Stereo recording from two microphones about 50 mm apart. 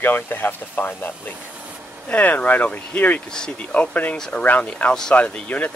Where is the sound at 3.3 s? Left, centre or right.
Centre.